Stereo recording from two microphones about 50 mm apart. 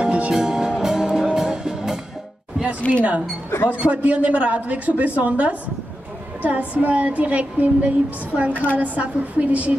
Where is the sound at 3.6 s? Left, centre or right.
Right.